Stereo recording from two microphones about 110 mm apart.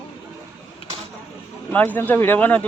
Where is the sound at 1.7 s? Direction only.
15° left (ahead or behind).